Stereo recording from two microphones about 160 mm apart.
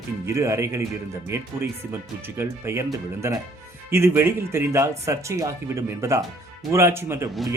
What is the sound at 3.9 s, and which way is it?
Speech, 15° right (ahead or behind).